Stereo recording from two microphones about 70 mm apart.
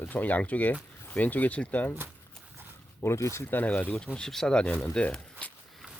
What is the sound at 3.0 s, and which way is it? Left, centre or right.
Speech, left.